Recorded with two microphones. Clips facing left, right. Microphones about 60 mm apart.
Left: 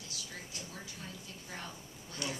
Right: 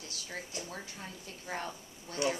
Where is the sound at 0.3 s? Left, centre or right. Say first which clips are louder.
Right 8 dB; right.